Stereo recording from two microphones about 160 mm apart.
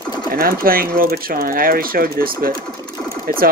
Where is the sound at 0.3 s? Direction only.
65° right (ahead or behind).